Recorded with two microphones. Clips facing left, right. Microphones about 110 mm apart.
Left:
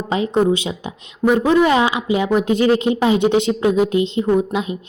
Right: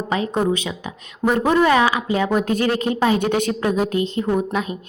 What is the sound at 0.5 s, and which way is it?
A woman's voice, 25° left (ahead or behind).